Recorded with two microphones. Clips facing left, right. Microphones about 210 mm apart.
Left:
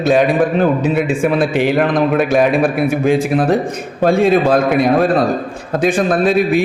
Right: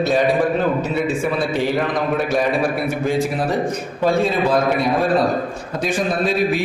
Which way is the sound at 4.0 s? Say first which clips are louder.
Left 6 dB; 90° left.